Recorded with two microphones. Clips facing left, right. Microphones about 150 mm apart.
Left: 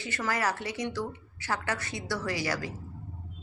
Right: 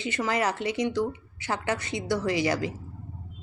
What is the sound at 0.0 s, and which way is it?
A woman's voice, 20° right (ahead or behind).